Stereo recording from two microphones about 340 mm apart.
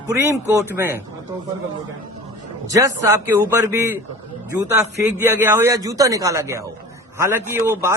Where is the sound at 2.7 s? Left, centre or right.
Centre.